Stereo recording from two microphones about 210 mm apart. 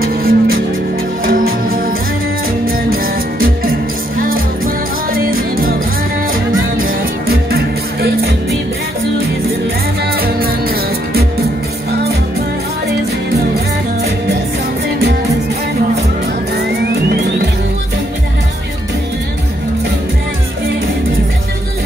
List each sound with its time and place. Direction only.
0.0 s music: 45° right (ahead or behind)
5.1 s music: 45° right (ahead or behind)
6.8 s music: 45° right (ahead or behind)